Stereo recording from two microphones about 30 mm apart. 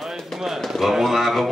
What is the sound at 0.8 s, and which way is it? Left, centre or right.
Speech, centre.